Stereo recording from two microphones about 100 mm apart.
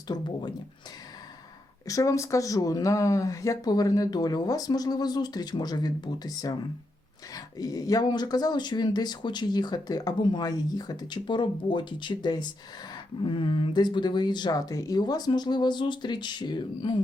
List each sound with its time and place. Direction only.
0.1 s speech: 45° left (ahead or behind)
1.9 s speech: 35° left (ahead or behind); by 17.0 s 50° left (ahead or behind)